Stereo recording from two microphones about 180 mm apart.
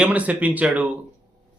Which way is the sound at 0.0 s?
10° right (ahead or behind).